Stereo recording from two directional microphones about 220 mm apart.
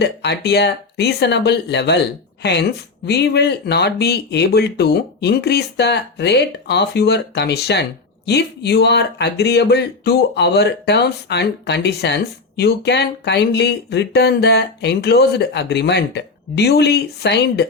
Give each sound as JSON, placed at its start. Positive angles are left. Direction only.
{"t": 0.0, "sound": "a woman's voice", "side_deg": 50}